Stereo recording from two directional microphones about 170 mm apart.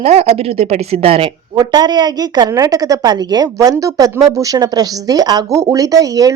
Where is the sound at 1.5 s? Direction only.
25° right (ahead or behind).